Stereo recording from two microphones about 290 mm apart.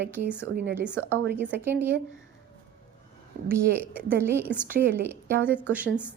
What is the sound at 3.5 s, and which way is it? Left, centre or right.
A woman's voice, centre.